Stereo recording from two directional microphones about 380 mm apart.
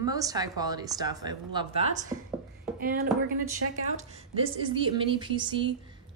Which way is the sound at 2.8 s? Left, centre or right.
Right.